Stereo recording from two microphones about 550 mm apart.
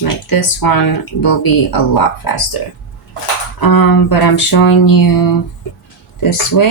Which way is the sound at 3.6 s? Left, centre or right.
Left.